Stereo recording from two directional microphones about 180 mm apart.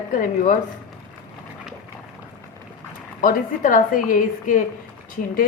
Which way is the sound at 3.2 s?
50° left (ahead or behind).